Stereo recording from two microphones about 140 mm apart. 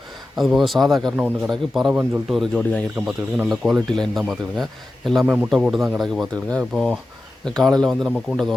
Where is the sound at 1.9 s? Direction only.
15° right (ahead or behind).